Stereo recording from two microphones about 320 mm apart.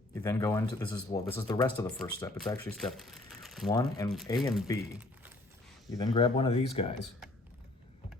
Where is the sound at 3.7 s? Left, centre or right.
Centre.